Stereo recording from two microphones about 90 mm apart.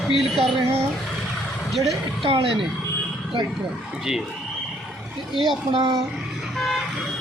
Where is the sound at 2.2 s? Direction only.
85° right.